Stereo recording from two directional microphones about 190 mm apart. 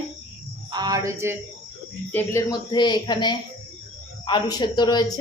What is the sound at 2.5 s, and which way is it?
Speech, 25° left (ahead or behind).